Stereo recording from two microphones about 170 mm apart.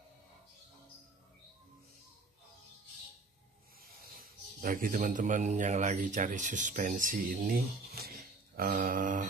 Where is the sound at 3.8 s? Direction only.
55° right (ahead or behind).